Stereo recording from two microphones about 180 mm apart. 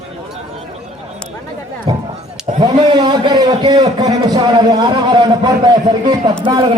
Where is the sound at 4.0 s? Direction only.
20° right (ahead or behind).